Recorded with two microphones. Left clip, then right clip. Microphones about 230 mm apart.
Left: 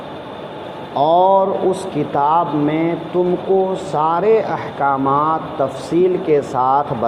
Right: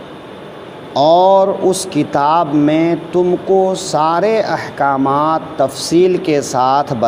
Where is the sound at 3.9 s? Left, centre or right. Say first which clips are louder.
Right 1 dB; right.